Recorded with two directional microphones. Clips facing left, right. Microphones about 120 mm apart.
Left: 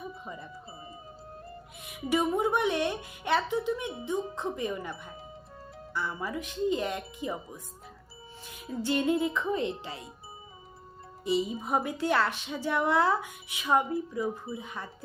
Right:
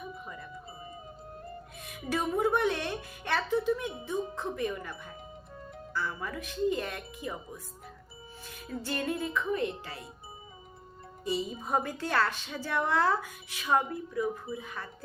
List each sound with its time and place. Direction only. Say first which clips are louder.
1.8 s speech: left 4 dB; 15° left (ahead or behind)
6.2 s music: left 1 dB; 20° left (ahead or behind)
8.8 s music: left 7 dB; 20° left (ahead or behind)
11.6 s speech: left 2 dB; 10° left (ahead or behind)
13.9 s music: left 1 dB; 30° left (ahead or behind)